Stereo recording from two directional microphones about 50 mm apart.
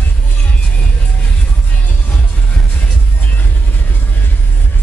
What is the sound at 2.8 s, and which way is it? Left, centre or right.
Music, left.